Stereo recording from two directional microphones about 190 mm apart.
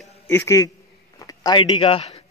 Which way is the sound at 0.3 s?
15° left (ahead or behind).